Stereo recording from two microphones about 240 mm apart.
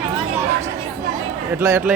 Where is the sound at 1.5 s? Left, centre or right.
Centre.